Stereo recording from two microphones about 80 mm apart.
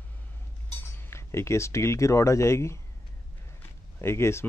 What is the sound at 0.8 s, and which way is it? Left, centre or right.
Speech, left.